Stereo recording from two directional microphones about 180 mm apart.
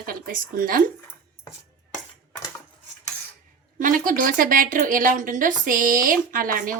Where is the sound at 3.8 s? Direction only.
50° right (ahead or behind).